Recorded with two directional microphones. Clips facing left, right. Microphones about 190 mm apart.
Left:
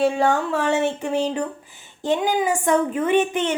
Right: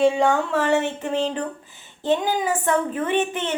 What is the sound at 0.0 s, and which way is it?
Speech, 10° left (ahead or behind).